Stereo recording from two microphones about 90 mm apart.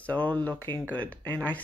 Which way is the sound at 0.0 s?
15° left (ahead or behind).